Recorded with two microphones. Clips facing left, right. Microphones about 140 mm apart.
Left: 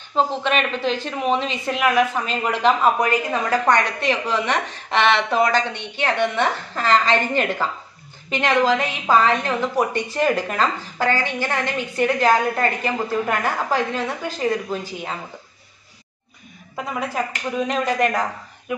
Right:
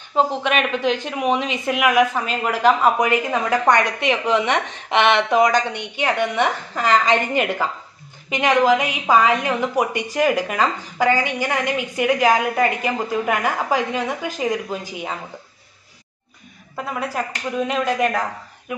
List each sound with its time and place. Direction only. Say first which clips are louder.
0.1 s a woman's voice: right 1 dB; 10° right (ahead or behind)
3.4 s a woman's voice: right 1 dB; 15° right (ahead or behind)
16.7 s speech: even; centre (ahead or behind)